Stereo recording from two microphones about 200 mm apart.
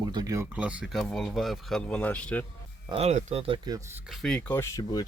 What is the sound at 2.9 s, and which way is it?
Speech, 35° right (ahead or behind).